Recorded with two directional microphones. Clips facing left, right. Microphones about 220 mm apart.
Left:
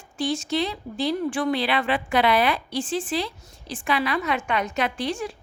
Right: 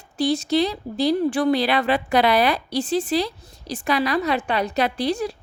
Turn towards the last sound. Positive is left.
turn(degrees=-35)  # may be behind; listen again after turning